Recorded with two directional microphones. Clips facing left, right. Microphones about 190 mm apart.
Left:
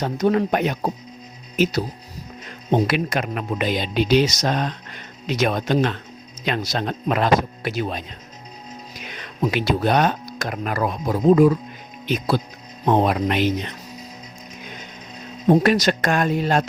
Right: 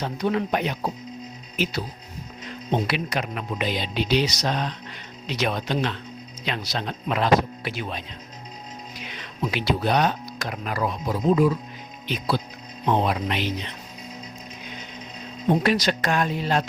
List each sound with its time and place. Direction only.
0.0 s speech: 45° left (ahead or behind)
9.0 s speech: 50° left (ahead or behind)
15.4 s speech: 45° left (ahead or behind)